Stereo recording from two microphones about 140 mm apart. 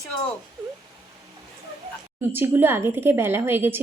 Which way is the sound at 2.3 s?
15° right (ahead or behind).